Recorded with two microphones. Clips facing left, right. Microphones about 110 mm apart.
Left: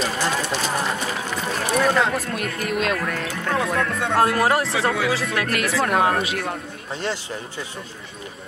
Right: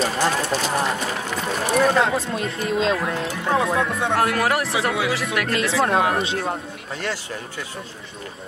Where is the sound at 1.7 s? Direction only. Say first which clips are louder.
Right 1 dB; 25° right (ahead or behind).